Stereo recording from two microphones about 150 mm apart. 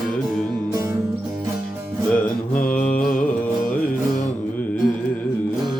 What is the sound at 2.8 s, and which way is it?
Mantra, 65° left (ahead or behind).